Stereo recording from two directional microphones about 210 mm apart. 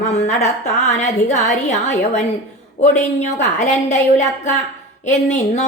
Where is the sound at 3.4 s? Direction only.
35° left (ahead or behind).